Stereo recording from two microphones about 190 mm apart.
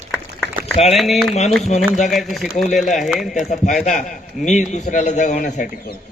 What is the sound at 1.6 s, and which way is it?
Speech, 35° left (ahead or behind).